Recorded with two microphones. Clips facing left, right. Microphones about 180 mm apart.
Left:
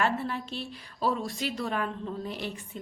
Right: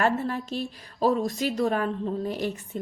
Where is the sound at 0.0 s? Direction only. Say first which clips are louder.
Right 4 dB; 45° right (ahead or behind).